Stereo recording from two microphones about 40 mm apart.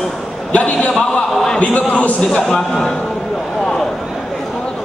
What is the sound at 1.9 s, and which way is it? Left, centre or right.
Speech, left.